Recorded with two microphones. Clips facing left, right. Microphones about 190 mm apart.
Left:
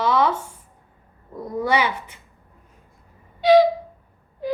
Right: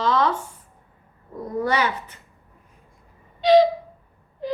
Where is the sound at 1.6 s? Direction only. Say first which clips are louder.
Left 2 dB; 10° left (ahead or behind).